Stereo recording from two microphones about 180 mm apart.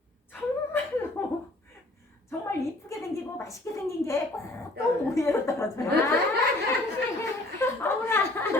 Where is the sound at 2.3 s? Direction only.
15° left (ahead or behind).